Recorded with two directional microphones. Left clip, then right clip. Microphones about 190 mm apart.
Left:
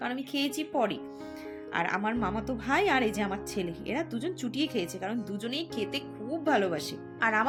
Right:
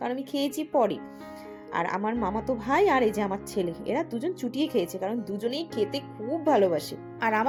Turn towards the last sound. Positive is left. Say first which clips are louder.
# right 1 dB
turn(degrees=-20)  # may be behind; listen again after turning